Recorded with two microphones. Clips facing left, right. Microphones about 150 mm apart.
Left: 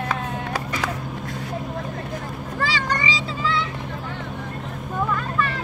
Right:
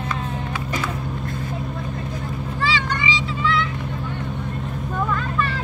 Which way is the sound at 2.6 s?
40° left (ahead or behind).